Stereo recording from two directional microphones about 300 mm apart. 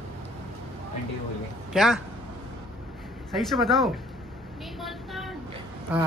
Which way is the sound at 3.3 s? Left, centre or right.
Centre.